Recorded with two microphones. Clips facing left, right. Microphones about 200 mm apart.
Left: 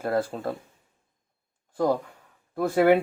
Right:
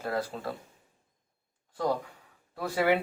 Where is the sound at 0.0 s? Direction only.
50° left (ahead or behind).